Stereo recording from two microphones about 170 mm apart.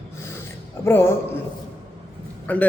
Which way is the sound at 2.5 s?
10° left (ahead or behind).